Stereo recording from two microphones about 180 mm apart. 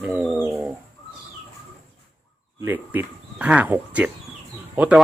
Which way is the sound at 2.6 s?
10° right (ahead or behind).